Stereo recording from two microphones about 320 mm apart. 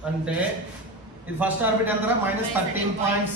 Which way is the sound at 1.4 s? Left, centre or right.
Centre.